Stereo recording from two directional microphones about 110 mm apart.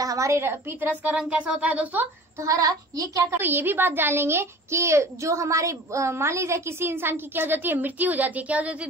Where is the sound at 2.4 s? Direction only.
30° right (ahead or behind).